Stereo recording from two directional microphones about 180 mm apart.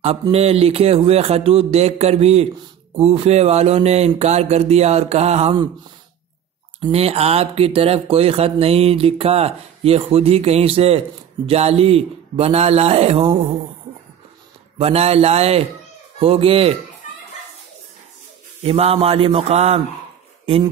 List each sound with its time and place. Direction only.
0.3 s speech: 35° right (ahead or behind)
6.8 s speech: 35° right (ahead or behind)
14.8 s speech: 35° right (ahead or behind)
18.6 s speech: 30° right (ahead or behind)